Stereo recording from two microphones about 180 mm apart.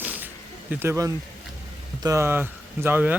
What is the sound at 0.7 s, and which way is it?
Speech, 10° right (ahead or behind).